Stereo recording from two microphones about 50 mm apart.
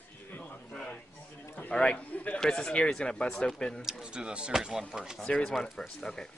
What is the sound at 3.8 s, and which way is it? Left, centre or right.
Speech, centre.